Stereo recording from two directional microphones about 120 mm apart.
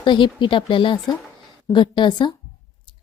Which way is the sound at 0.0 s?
40° left (ahead or behind).